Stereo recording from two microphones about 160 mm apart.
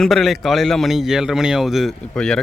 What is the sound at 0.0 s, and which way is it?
A man's voice, centre (ahead or behind).